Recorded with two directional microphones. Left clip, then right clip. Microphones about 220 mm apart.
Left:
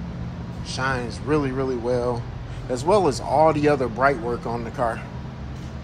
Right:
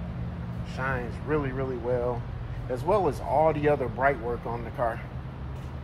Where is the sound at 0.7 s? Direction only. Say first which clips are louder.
Left 6 dB; 10° left (ahead or behind).